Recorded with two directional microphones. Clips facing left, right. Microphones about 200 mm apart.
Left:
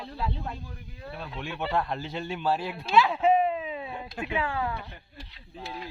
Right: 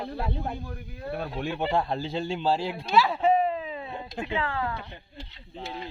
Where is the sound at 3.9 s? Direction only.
25° right (ahead or behind).